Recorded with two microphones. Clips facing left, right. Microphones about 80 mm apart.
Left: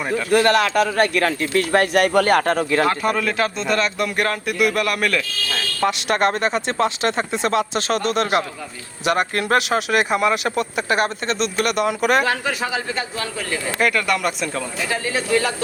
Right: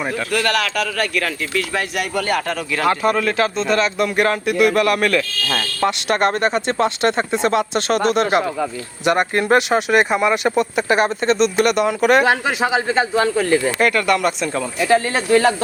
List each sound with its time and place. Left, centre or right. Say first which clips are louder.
0.3 s speech: left 6 dB; left
2.8 s speech: right 3 dB; centre
12.2 s speech: right 5 dB; right
13.7 s speech: right 3 dB; centre
14.8 s speech: right 7 dB; right